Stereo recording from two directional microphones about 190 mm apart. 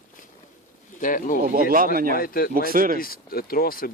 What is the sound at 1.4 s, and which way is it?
Speech, 50° right (ahead or behind).